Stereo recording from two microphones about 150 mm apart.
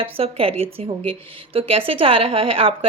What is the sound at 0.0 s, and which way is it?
Speech, 40° right (ahead or behind).